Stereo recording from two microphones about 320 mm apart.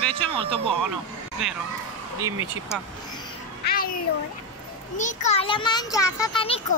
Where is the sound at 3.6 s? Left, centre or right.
Left.